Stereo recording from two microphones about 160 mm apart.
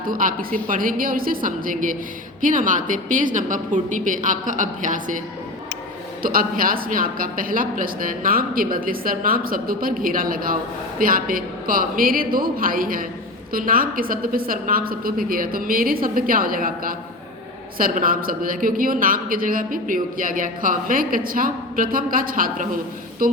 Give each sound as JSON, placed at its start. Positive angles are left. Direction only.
{"t": 0.0, "sound": "a woman's voice", "side_deg": -60}
{"t": 6.2, "sound": "speech", "side_deg": -60}